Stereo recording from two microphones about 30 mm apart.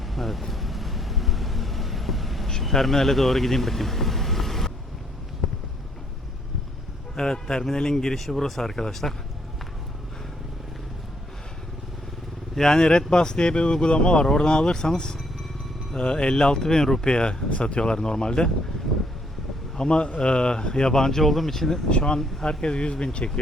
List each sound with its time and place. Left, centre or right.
0.1 s vehicle: centre
2.6 s speech: centre
7.2 s a man's voice: left
12.5 s speech: left
17.1 s speech: left
17.8 s speech: left
19.7 s speech: left
21.2 s a man's voice: centre
21.8 s speech: left